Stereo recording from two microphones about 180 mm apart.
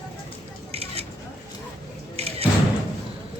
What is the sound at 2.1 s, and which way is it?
Music, 35° right (ahead or behind).